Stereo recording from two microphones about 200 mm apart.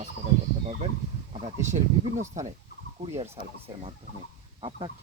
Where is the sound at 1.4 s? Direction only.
35° right (ahead or behind).